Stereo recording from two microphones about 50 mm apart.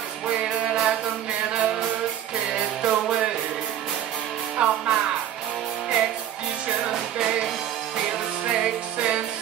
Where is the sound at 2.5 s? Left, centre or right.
Centre.